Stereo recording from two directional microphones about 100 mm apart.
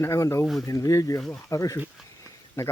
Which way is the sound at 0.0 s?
25° left (ahead or behind).